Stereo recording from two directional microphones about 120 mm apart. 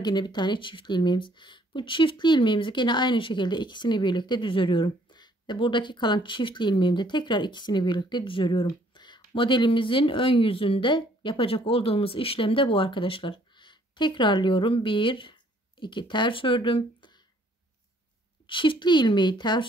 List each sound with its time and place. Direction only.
0.0 s speech: 40° left (ahead or behind)
18.5 s speech: 45° left (ahead or behind)